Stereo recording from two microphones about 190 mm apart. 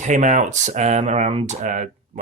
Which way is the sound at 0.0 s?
40° right (ahead or behind).